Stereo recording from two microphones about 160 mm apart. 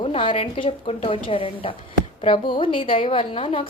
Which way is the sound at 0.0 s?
35° left (ahead or behind).